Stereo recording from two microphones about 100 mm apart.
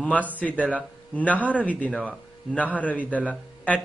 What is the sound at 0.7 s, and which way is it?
A man's voice, 15° left (ahead or behind).